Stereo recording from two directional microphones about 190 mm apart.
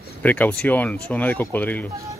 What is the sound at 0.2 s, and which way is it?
Speech, 10° left (ahead or behind).